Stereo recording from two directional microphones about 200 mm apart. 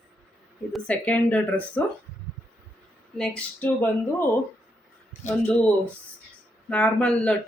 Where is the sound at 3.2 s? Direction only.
5° left (ahead or behind).